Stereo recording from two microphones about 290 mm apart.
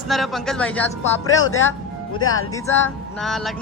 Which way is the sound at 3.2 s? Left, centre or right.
Centre.